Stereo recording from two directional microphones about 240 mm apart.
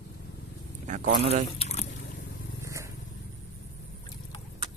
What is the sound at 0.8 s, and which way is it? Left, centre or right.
Speech, right.